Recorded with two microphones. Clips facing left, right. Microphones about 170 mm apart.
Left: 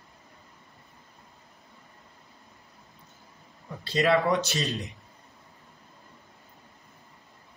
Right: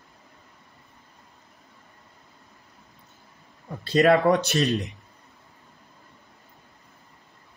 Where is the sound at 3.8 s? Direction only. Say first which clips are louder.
Right 5 dB; 50° right (ahead or behind).